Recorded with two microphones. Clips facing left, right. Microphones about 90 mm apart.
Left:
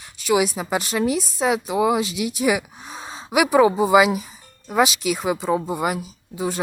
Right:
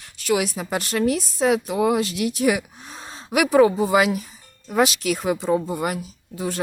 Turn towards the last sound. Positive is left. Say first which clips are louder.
# left 2 dB
turn(degrees=5)  # may be behind; listen again after turning